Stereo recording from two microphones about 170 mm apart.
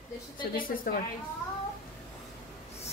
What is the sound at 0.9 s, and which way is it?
Speech, 60° left (ahead or behind).